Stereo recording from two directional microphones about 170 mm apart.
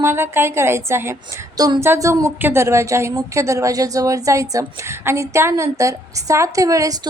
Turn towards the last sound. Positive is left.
turn(degrees=-20)  # may be behind; listen again after turning